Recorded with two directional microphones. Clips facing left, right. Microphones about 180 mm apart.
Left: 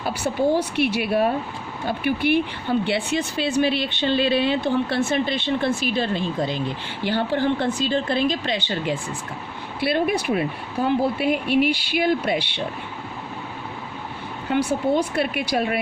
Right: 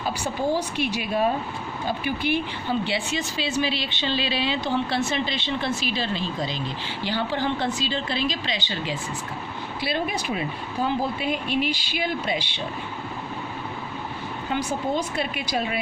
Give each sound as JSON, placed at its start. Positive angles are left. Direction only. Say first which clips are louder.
{"t": 0.5, "sound": "a woman's voice", "louder": "left 4 dB", "side_deg": 60}
{"t": 14.5, "sound": "a woman's voice", "louder": "left 5 dB", "side_deg": 60}